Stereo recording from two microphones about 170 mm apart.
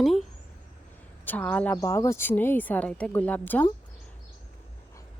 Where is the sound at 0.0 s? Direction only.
Centre (ahead or behind).